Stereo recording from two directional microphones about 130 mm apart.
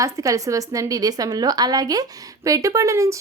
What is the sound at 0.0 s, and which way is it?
A woman's voice, 25° right (ahead or behind).